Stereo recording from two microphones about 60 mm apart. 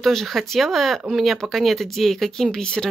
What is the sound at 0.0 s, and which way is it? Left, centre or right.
Speech, centre.